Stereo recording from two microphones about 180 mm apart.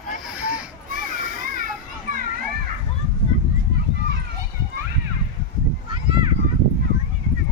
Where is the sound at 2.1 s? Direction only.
50° right (ahead or behind).